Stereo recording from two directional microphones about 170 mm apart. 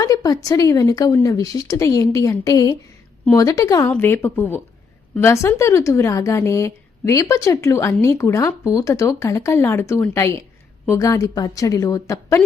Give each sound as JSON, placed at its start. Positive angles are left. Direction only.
{"t": 0.0, "sound": "speech", "side_deg": 20}